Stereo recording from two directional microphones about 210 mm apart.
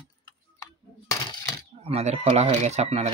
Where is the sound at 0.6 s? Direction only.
15° left (ahead or behind).